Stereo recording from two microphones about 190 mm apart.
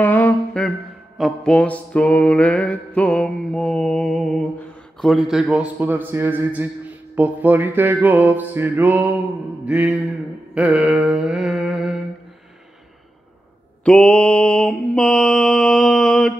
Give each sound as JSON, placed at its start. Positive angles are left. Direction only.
{"t": 0.0, "sound": "a sound", "side_deg": 10}
{"t": 5.0, "sound": "a man's voice", "side_deg": 0}
{"t": 10.5, "sound": "mantra", "side_deg": -5}
{"t": 13.8, "sound": "mantra", "side_deg": 5}